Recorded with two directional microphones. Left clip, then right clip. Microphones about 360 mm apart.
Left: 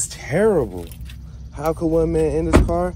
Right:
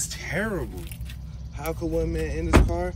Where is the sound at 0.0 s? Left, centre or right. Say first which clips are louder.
Left 10 dB; centre.